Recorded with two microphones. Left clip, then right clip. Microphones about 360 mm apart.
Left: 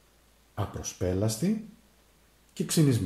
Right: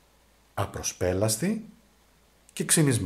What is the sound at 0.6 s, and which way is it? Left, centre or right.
Speech, right.